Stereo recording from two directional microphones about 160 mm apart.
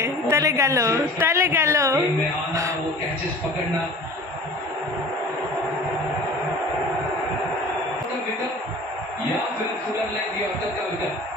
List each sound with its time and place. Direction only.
0.0 s a woman's voice: 20° right (ahead or behind)